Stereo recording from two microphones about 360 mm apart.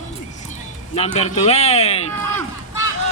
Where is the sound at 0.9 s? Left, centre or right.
Centre.